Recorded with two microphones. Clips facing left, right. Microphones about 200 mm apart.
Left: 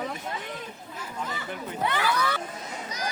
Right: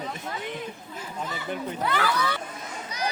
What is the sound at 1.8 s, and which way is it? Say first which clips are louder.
Speech: right 1 dB; 15° left (ahead or behind).